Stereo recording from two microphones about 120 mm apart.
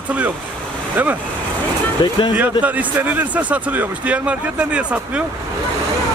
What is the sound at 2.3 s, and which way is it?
Speech, 10° right (ahead or behind).